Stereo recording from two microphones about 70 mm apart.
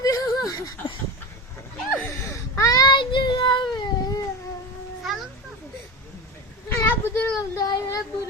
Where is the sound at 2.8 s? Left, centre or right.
Left.